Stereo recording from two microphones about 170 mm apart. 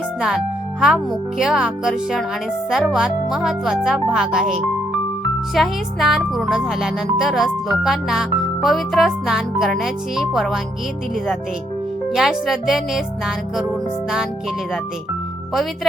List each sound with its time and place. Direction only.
0.2 s speech: 5° right (ahead or behind)
5.5 s speech: centre (ahead or behind)
12.1 s speech: centre (ahead or behind)